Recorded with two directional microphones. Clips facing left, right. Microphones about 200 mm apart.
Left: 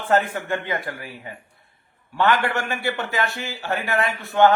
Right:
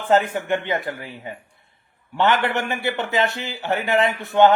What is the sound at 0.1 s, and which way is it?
A man's voice, 20° right (ahead or behind).